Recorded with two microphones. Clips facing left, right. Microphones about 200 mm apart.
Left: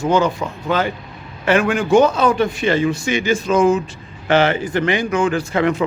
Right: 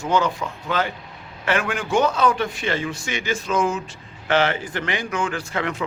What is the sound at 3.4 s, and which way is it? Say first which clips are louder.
Speech: left 8 dB; 25° left (ahead or behind).